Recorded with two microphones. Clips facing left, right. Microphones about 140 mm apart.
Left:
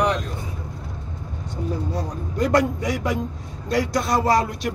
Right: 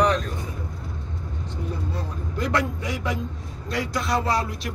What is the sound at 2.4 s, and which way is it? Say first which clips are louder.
Speech: left 6 dB; 45° left (ahead or behind).